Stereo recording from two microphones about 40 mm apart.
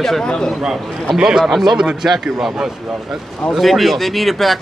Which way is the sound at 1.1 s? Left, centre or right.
Centre.